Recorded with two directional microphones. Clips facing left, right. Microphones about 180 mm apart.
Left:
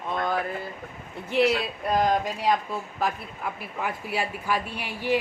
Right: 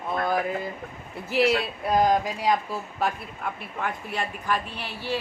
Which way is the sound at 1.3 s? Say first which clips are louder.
Even; centre (ahead or behind).